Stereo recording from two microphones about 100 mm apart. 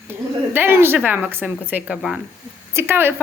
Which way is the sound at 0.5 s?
20° right (ahead or behind).